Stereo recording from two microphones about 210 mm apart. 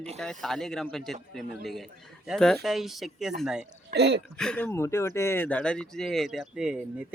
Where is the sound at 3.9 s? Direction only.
50° right (ahead or behind).